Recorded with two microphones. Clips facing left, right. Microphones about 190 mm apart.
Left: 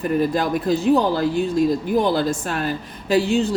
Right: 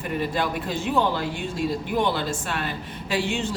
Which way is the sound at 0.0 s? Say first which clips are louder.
Left 6 dB; 40° left (ahead or behind).